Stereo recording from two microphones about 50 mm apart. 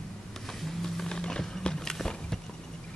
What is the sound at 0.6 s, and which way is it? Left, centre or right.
Wild animals, centre.